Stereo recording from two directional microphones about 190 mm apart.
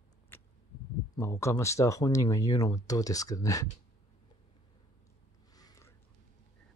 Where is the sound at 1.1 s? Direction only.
15° left (ahead or behind).